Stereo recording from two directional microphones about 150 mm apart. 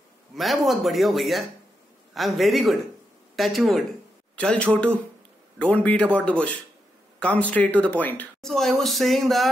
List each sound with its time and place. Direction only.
0.4 s a man's voice: centre (ahead or behind)